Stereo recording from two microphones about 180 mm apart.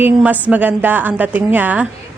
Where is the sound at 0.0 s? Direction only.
10° right (ahead or behind).